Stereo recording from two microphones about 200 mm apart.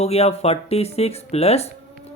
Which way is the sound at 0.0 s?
30° left (ahead or behind).